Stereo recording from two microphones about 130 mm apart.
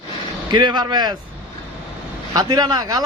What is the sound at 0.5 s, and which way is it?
Speech, 35° right (ahead or behind).